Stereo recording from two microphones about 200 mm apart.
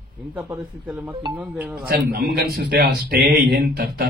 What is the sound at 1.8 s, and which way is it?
Speech, 50° right (ahead or behind).